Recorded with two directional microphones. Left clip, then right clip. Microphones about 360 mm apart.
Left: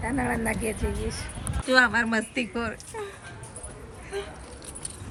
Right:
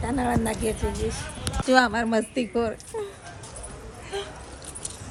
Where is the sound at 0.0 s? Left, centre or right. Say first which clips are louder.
Right 2 dB; centre.